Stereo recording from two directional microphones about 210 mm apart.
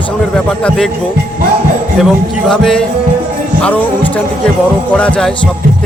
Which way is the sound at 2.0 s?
Centre (ahead or behind).